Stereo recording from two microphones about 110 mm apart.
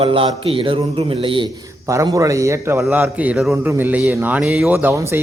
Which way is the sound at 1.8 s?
30° right (ahead or behind).